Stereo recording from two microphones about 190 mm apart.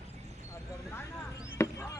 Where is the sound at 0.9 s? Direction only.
15° left (ahead or behind).